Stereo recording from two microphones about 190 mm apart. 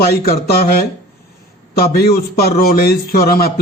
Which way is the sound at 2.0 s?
55° left (ahead or behind).